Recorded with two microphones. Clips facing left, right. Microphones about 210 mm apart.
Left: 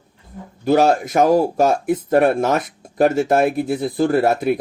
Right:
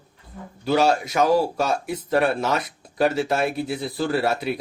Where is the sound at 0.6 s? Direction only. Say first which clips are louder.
Left 5 dB; 50° left (ahead or behind).